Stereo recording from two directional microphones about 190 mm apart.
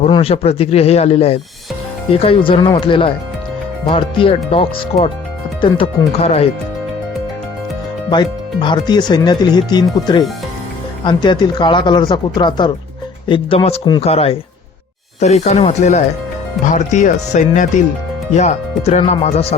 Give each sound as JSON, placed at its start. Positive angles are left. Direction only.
{"t": 0.0, "sound": "speech", "side_deg": 30}
{"t": 8.1, "sound": "speech", "side_deg": 25}